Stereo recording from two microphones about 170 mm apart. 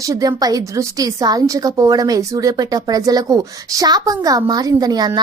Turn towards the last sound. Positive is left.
turn(degrees=-25)  # may be behind; listen again after turning